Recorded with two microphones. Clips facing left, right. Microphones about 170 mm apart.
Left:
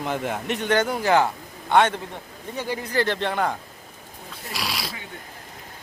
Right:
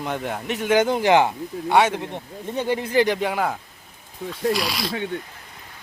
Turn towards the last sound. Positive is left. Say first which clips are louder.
# right 9 dB
turn(degrees=5)  # may be behind; listen again after turning